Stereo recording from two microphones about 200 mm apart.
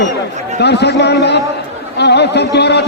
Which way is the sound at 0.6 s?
55° left (ahead or behind).